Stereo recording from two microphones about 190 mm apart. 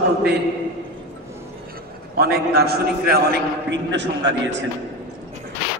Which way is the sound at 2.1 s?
55° right (ahead or behind).